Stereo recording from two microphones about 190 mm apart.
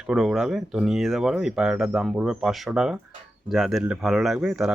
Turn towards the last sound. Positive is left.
turn(degrees=0)  # may be behind; listen again after turning